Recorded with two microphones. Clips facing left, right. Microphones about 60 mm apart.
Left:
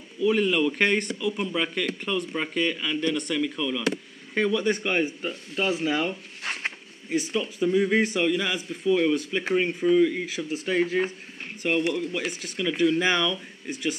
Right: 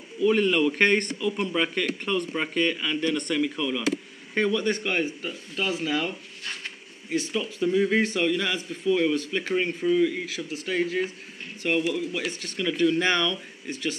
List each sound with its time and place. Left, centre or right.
0.2 s speech: centre
6.4 s a sound: left
7.4 s speech: centre
10.2 s speech: left
11.6 s speech: centre